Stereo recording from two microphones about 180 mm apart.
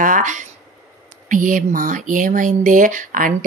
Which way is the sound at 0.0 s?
45° right (ahead or behind).